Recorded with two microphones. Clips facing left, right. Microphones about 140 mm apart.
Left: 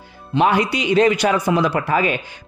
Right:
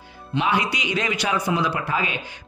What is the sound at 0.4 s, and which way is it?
A man's voice, 45° left (ahead or behind).